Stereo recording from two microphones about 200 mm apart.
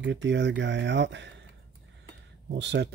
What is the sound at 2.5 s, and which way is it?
Speech, 60° right (ahead or behind).